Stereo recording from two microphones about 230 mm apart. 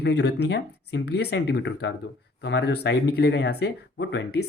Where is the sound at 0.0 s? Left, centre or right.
Left.